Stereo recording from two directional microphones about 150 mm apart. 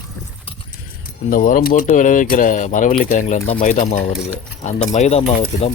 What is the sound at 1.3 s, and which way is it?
Speech, 65° left (ahead or behind).